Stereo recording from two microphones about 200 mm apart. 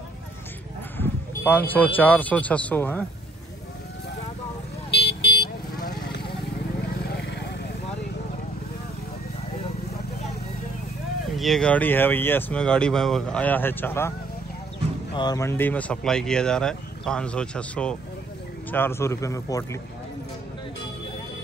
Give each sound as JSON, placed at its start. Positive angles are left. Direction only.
{"t": 0.9, "sound": "speech", "side_deg": 10}
{"t": 5.4, "sound": "vehicle", "side_deg": 55}
{"t": 11.3, "sound": "speech", "side_deg": 0}
{"t": 15.1, "sound": "speech", "side_deg": 20}